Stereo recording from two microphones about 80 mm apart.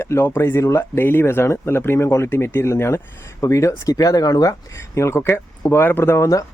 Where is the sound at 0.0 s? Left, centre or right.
Left.